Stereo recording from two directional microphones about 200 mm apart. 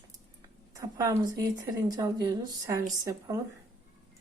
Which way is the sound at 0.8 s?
15° right (ahead or behind).